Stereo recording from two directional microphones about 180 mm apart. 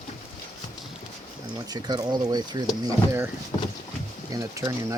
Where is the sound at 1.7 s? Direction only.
20° right (ahead or behind).